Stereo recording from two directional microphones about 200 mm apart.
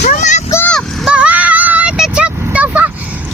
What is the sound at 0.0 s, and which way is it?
Vehicle, 40° left (ahead or behind).